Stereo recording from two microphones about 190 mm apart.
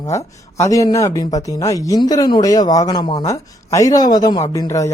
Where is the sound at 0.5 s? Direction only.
15° left (ahead or behind).